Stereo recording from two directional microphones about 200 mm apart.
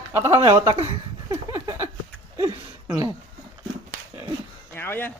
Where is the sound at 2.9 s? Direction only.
15° right (ahead or behind).